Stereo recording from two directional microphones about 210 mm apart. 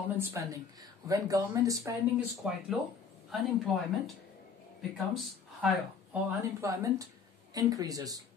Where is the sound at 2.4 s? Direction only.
5° right (ahead or behind).